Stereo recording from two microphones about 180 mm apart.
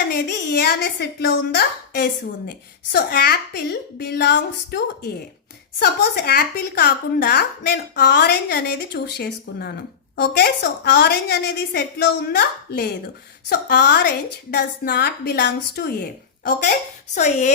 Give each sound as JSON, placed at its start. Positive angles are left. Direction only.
{"t": 0.1, "sound": "a woman's voice", "side_deg": 65}
{"t": 17.2, "sound": "speech", "side_deg": 40}